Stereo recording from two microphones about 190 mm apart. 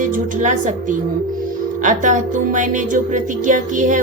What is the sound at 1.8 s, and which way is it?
Music, 40° right (ahead or behind).